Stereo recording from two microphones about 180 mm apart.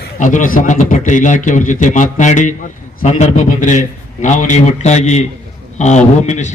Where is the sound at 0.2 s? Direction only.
45° left (ahead or behind).